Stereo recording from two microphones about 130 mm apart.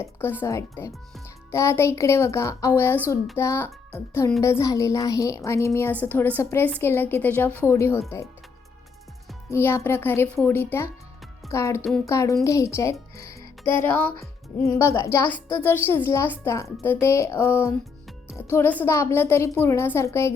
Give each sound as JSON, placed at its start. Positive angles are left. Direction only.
{"t": 0.0, "sound": "a child's voice", "side_deg": 15}
{"t": 9.5, "sound": "a child's voice", "side_deg": 20}